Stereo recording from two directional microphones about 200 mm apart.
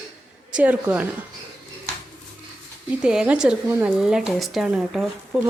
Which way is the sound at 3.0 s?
5° right (ahead or behind).